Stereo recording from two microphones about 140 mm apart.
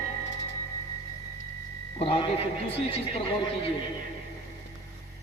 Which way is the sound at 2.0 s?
40° left (ahead or behind).